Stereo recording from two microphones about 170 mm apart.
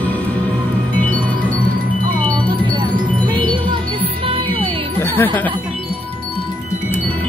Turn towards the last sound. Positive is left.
turn(degrees=10)  # may be behind; listen again after turning